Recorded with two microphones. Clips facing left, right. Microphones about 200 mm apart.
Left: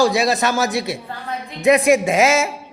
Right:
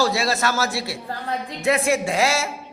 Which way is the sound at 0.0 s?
15° left (ahead or behind).